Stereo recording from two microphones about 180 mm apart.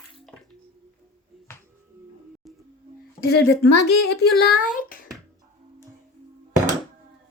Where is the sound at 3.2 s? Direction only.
70° left (ahead or behind); by 5.0 s 50° left (ahead or behind).